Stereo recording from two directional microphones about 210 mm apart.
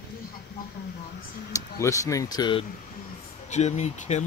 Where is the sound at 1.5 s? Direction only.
15° left (ahead or behind).